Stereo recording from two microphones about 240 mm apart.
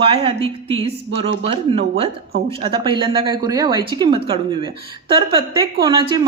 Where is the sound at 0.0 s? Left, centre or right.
Right.